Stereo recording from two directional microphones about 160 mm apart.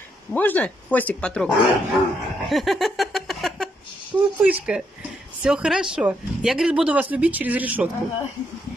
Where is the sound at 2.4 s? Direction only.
Centre (ahead or behind).